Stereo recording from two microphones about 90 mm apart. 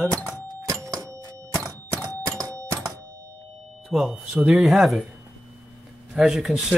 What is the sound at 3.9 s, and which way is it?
Speech, 5° right (ahead or behind).